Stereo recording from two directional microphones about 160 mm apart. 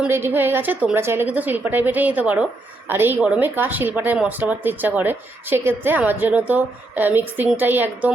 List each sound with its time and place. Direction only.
0.0 s a woman's voice: 15° right (ahead or behind)